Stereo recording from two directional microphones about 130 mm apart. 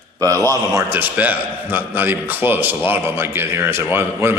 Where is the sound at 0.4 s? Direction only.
25° right (ahead or behind).